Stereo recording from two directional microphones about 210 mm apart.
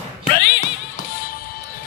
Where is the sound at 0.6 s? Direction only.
40° left (ahead or behind).